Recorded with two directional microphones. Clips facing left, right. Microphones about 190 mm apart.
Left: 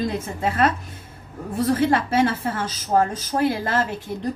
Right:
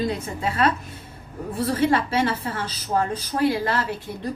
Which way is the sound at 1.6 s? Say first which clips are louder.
Left 1 dB; 50° left (ahead or behind).